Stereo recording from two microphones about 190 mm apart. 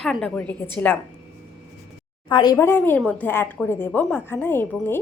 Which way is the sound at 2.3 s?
25° left (ahead or behind).